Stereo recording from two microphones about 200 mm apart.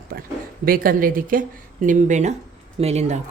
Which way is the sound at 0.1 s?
45° right (ahead or behind).